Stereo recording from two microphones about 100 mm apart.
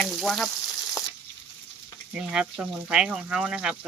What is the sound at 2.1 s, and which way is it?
Speech, 10° right (ahead or behind).